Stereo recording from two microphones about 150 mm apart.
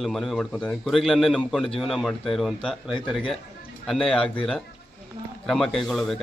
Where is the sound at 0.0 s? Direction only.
Centre (ahead or behind).